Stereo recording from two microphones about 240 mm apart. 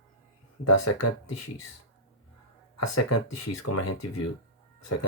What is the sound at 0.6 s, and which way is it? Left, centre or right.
Speech, left.